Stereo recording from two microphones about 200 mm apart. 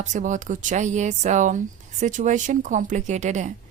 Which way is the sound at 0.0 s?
40° right (ahead or behind).